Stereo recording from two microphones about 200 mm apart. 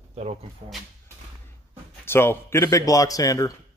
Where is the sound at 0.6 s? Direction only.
35° right (ahead or behind).